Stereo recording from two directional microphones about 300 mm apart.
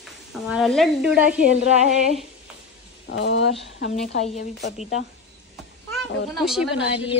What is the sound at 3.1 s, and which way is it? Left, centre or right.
Speech, left.